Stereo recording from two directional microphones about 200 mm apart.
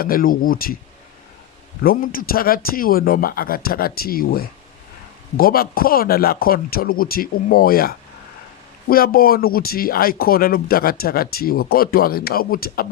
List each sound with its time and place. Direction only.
0.0 s speech: 45° left (ahead or behind)
1.8 s speech: 45° left (ahead or behind)